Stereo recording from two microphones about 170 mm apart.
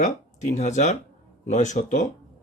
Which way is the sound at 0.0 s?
45° left (ahead or behind).